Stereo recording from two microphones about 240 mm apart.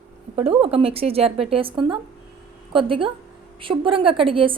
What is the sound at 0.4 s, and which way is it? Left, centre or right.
A woman's voice, right.